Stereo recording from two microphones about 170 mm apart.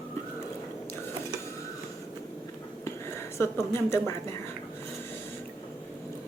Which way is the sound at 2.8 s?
15° left (ahead or behind).